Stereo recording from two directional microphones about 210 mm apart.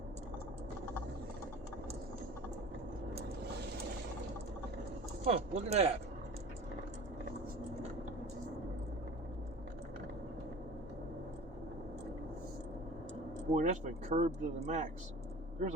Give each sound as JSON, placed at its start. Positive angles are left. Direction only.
{"t": 5.2, "sound": "speech", "side_deg": -30}
{"t": 13.5, "sound": "speech", "side_deg": -35}